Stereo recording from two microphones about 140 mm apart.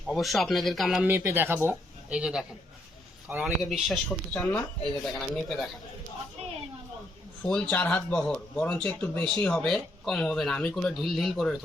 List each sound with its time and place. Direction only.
0.1 s speech: centre (ahead or behind)
1.0 s speech: 15° right (ahead or behind)
3.4 s speech: centre (ahead or behind)
7.4 s speech: 10° left (ahead or behind)